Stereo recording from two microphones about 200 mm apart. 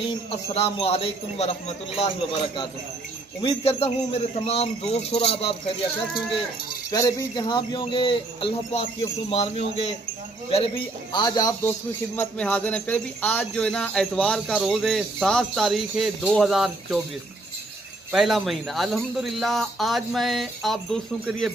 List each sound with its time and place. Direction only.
0.3 s speech: 30° left (ahead or behind)
6.9 s speech: 15° left (ahead or behind); by 17.0 s centre (ahead or behind)
18.1 s speech: centre (ahead or behind)